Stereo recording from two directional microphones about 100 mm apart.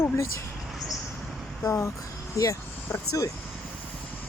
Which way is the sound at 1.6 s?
25° left (ahead or behind).